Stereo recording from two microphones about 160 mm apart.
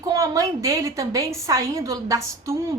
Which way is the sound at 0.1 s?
20° right (ahead or behind).